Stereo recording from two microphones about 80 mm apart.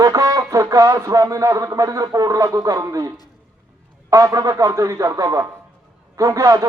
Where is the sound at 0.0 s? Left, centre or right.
Right.